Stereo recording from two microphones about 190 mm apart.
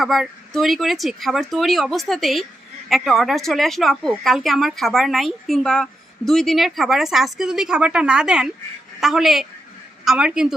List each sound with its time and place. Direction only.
0.0 s a woman's voice: centre (ahead or behind)